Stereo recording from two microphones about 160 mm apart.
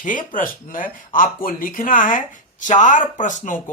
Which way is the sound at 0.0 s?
55° left (ahead or behind).